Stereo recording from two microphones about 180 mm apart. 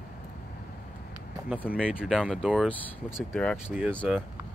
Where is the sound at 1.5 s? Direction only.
5° right (ahead or behind).